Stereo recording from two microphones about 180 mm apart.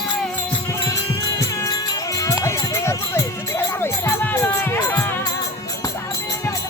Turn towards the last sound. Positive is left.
turn(degrees=10)  # may be behind; listen again after turning